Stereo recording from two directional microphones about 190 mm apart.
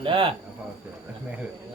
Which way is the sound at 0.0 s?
30° right (ahead or behind).